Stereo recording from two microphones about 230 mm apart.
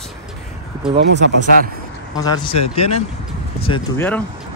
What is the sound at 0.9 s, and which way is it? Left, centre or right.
Speech, right.